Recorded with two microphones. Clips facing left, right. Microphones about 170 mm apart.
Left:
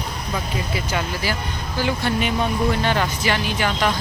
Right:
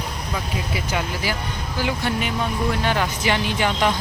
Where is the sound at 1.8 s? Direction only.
10° right (ahead or behind).